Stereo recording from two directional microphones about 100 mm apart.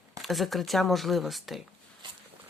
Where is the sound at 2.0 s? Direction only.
50° right (ahead or behind).